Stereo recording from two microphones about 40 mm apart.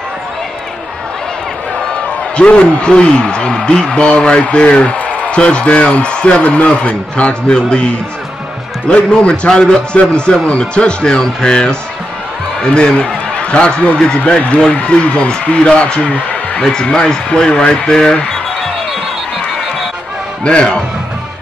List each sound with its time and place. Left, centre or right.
2.3 s a man's voice: left
12.7 s a man's voice: left
20.4 s speech: left